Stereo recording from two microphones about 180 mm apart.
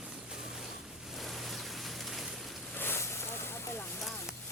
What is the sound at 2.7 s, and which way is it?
Boat, 15° left (ahead or behind).